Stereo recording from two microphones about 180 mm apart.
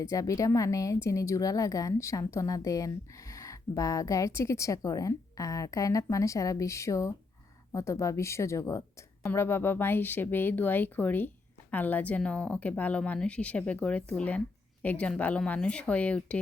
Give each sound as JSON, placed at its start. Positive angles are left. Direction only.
{"t": 0.0, "sound": "a woman's voice", "side_deg": 15}